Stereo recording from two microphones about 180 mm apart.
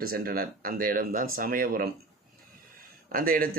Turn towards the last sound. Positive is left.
turn(degrees=-55)  # may be behind; listen again after turning